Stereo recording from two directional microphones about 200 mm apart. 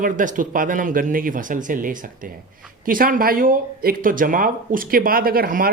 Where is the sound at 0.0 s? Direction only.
40° right (ahead or behind).